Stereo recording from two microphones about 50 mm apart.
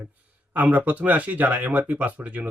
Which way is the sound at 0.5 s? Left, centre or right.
Right.